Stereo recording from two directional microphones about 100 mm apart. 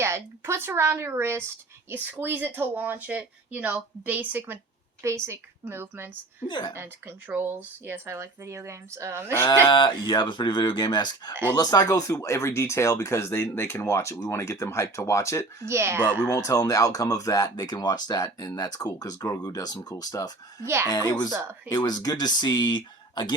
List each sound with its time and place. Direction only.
0.0 s speech: 25° right (ahead or behind)
6.5 s speech: 50° left (ahead or behind)
6.7 s speech: 20° right (ahead or behind)
9.6 s speech: 50° left (ahead or behind); by 15.4 s 30° left (ahead or behind)
15.6 s speech: 25° right (ahead or behind)
16.3 s speech: 35° left (ahead or behind); by 23.3 s 50° left (ahead or behind)